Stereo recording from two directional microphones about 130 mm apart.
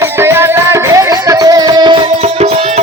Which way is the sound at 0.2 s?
20° right (ahead or behind).